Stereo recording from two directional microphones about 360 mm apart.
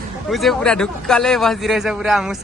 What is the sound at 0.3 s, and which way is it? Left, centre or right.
A man's voice, centre.